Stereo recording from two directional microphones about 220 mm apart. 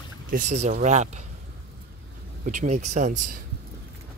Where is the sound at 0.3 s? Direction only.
35° right (ahead or behind).